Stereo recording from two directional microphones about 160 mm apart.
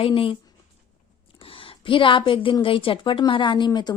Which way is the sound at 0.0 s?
35° left (ahead or behind).